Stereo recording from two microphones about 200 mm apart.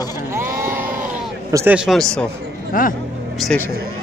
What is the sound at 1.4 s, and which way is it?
Speech, 15° right (ahead or behind).